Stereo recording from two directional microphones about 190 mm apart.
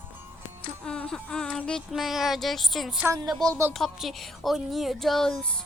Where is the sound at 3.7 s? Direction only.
Centre (ahead or behind).